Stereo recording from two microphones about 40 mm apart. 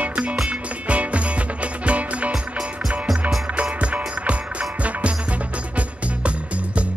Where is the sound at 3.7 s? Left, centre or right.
Right.